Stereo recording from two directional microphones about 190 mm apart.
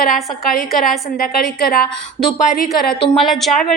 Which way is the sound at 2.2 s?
Centre (ahead or behind).